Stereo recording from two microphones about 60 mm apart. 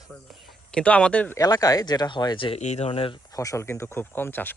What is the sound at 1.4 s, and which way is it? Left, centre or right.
Speech, left.